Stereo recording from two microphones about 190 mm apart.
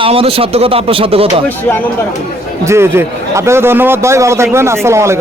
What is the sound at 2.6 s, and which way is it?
A man's voice, 15° right (ahead or behind).